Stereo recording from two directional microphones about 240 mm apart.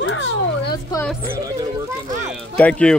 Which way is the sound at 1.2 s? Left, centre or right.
Centre.